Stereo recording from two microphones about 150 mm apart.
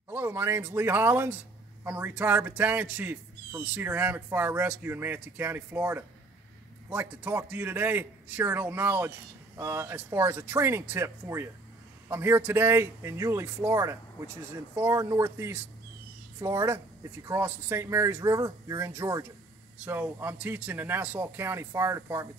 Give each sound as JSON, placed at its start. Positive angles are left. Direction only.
{"t": 0.1, "sound": "speech", "side_deg": -15}